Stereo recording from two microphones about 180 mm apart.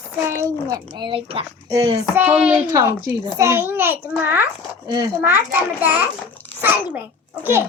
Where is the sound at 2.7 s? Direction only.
20° right (ahead or behind).